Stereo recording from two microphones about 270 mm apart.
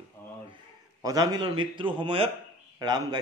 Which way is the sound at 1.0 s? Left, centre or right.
Centre.